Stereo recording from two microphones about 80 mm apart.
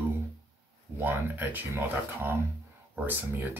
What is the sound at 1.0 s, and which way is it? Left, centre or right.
Speech, right.